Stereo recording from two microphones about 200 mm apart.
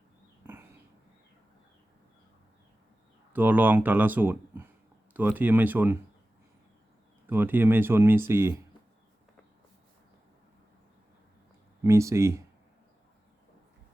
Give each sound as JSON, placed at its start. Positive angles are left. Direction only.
{"t": 3.3, "sound": "speech", "side_deg": -10}
{"t": 7.3, "sound": "speech", "side_deg": -10}
{"t": 11.8, "sound": "speech", "side_deg": -15}